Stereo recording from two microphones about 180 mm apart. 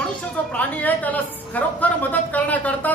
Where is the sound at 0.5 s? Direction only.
10° left (ahead or behind).